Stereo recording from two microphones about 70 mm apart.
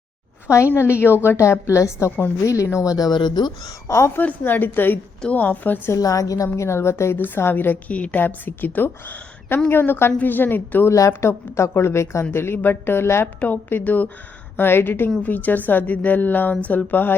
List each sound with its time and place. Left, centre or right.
0.4 s a woman's voice: left
2.8 s speech: left
3.8 s a woman's voice: left
4.2 s a woman's voice: left
6.0 s a woman's voice: left